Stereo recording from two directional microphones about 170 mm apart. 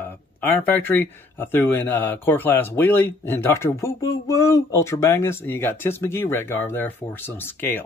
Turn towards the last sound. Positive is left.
turn(degrees=10)  # may be behind; listen again after turning